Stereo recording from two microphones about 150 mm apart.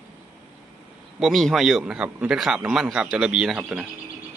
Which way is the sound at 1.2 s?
Centre (ahead or behind).